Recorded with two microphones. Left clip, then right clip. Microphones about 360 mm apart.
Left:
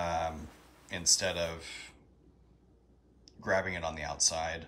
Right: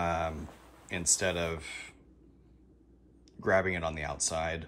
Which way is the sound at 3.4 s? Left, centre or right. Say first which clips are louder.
Right 3 dB; centre.